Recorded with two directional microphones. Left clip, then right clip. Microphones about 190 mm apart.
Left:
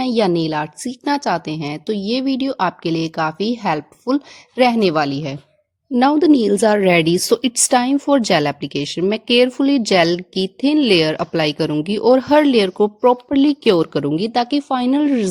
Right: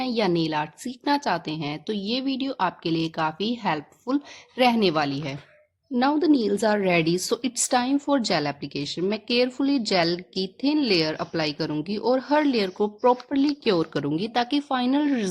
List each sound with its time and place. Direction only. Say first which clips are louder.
0.0 s a woman's voice: left 7 dB; 35° left (ahead or behind)